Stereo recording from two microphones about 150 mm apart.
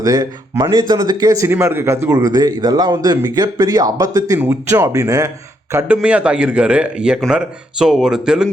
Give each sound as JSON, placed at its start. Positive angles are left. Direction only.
{"t": 0.0, "sound": "speech", "side_deg": -25}
{"t": 5.7, "sound": "a man's voice", "side_deg": -10}